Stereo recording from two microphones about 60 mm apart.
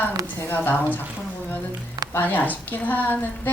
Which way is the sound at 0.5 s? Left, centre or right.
Left.